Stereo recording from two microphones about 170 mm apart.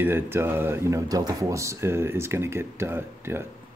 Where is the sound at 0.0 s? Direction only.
15° right (ahead or behind).